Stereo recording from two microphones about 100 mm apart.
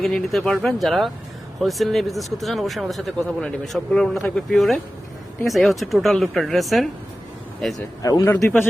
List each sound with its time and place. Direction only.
0.0 s speech: centre (ahead or behind)
8.2 s a man's voice: 20° left (ahead or behind)